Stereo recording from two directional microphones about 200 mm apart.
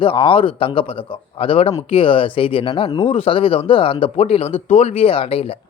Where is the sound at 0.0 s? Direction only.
25° left (ahead or behind).